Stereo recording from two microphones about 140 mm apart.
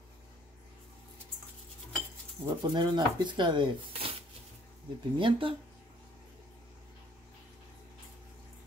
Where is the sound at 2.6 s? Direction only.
35° right (ahead or behind).